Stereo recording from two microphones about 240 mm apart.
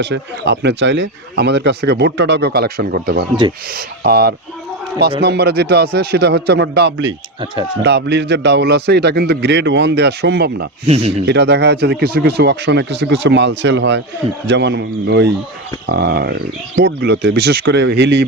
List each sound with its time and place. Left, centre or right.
0.0 s speech: right
10.8 s speech: right
11.3 s speech: right